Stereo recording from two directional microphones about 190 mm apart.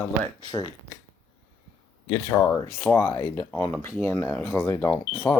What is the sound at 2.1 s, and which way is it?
Speech, 15° left (ahead or behind).